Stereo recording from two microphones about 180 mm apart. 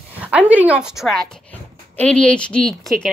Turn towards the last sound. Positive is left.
turn(degrees=5)  # may be behind; listen again after turning